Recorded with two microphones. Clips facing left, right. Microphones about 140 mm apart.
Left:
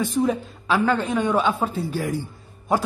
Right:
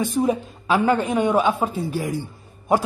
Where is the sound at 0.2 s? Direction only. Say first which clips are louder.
Right 1 dB; 20° right (ahead or behind).